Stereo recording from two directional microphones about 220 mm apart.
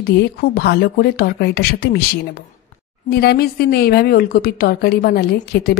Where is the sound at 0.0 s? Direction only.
45° left (ahead or behind).